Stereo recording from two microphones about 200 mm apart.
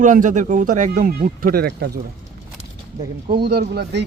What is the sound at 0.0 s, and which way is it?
Speech, 40° right (ahead or behind).